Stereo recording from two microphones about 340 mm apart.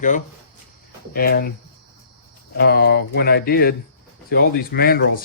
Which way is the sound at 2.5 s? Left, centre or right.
Left.